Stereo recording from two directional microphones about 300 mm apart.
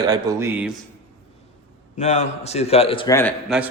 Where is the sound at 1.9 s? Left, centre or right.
Left.